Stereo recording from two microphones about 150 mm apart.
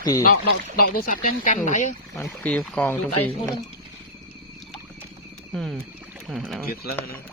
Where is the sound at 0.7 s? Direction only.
80° left; by 1.9 s 55° left (ahead or behind).